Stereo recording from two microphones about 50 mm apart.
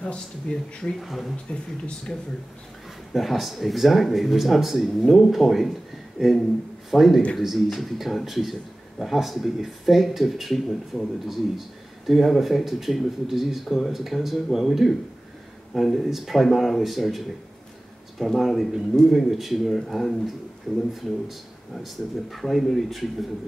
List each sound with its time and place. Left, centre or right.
0.0 s speech: centre
0.9 s a man's voice: centre
3.1 s a man's voice: centre
18.2 s a man's voice: centre
20.7 s speech: centre
21.7 s a man's voice: centre